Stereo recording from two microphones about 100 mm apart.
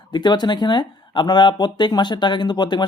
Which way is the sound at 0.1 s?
45° left (ahead or behind).